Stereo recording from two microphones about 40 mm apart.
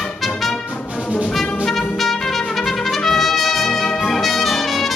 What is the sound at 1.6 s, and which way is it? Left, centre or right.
Trumpet, centre.